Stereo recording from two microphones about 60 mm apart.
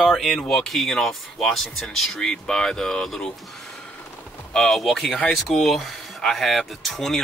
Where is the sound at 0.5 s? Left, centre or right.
Centre.